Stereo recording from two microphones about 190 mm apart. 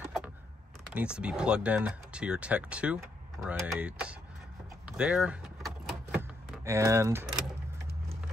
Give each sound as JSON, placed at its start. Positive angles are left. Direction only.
{"t": 0.9, "sound": "speech", "side_deg": -5}
{"t": 4.8, "sound": "vehicle", "side_deg": -5}
{"t": 6.1, "sound": "power windows", "side_deg": -15}